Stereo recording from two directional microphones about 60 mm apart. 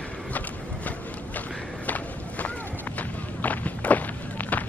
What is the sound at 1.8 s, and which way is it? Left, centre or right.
Walk, left.